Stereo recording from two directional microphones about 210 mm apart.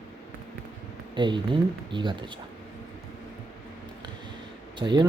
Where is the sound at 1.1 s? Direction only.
20° right (ahead or behind).